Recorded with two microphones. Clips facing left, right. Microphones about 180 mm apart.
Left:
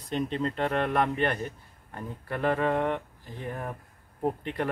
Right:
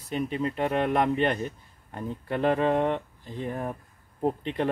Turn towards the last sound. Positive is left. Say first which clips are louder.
# right 2 dB
turn(degrees=-20)  # may be behind; listen again after turning